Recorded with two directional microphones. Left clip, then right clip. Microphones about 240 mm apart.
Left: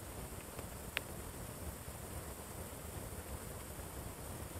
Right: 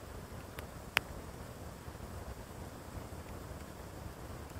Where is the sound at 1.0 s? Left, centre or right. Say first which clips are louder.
Right 9 dB; right.